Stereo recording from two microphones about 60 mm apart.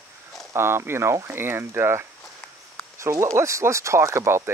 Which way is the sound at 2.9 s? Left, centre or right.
Right.